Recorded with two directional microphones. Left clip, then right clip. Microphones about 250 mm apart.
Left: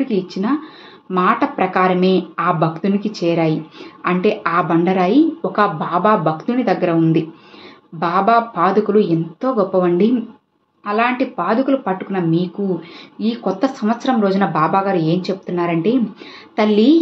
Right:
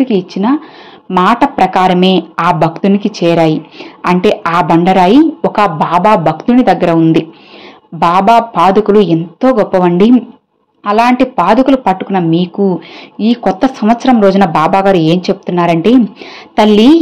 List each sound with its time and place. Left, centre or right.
0.0 s a woman's voice: right